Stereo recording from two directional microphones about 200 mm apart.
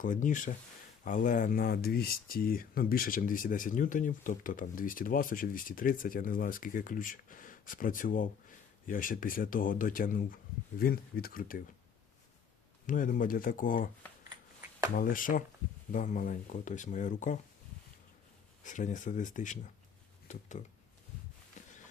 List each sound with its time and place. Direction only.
0.0 s speech: 40° left (ahead or behind)
12.9 s speech: 40° left (ahead or behind)
14.9 s speech: 45° left (ahead or behind)
18.6 s speech: 40° left (ahead or behind)
21.6 s heart sounds: 35° left (ahead or behind)